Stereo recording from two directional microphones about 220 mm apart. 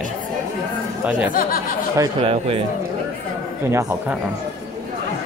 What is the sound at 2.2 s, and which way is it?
Speech, 25° right (ahead or behind).